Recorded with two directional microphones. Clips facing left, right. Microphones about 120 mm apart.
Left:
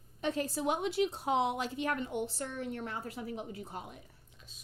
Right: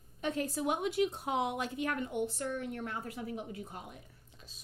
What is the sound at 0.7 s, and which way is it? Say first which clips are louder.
A woman's voice: even; 30° left (ahead or behind).